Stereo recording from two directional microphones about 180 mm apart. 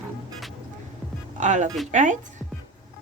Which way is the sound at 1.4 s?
45° right (ahead or behind).